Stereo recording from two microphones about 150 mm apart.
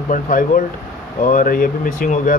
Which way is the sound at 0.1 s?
65° left (ahead or behind).